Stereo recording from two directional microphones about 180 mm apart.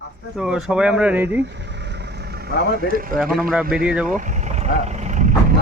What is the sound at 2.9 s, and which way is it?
Speech, 50° right (ahead or behind).